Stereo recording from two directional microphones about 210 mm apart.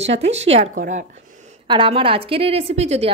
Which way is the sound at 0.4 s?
30° right (ahead or behind).